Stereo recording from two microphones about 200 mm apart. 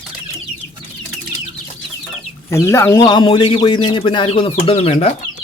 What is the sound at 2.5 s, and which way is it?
A man's voice, 15° left (ahead or behind).